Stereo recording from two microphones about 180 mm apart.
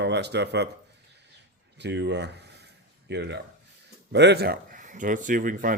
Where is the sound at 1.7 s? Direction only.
75° right (ahead or behind).